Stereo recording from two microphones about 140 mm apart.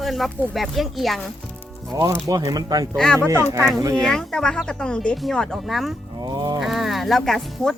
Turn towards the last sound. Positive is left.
turn(degrees=5)  # may be behind; listen again after turning